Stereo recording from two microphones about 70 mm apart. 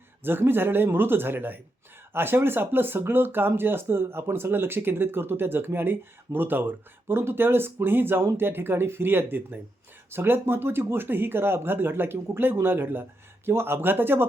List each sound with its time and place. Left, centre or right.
0.2 s speech: right